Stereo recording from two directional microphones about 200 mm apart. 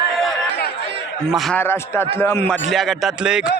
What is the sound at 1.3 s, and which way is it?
A man's voice, 5° left (ahead or behind).